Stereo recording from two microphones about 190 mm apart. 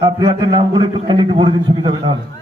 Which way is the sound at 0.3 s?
25° right (ahead or behind).